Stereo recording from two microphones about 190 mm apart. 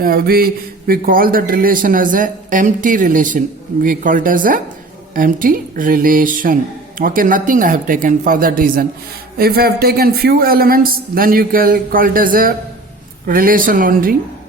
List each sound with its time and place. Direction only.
0.0 s speech: 50° right (ahead or behind)